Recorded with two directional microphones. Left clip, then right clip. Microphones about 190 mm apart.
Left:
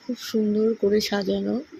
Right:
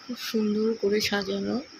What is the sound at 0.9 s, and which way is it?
Speech, 20° left (ahead or behind).